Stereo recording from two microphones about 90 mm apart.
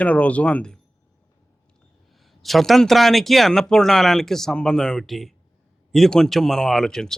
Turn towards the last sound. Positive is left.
turn(degrees=5)  # may be behind; listen again after turning